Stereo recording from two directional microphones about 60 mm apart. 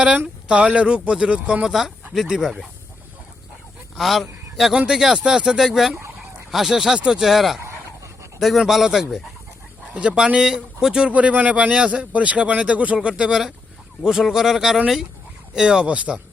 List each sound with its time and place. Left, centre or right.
0.4 s speech: centre
3.9 s speech: centre
7.6 s dog: right
8.4 s speech: centre
9.9 s speech: centre
11.1 s speech: right